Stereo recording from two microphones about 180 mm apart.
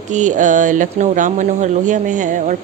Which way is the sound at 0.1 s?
45° right (ahead or behind).